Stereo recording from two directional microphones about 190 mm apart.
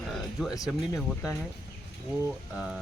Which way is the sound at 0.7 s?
15° left (ahead or behind).